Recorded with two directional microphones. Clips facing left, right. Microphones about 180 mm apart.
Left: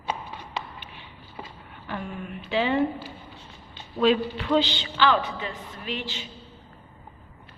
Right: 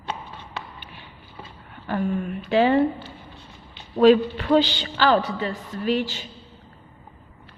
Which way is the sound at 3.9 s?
45° right (ahead or behind).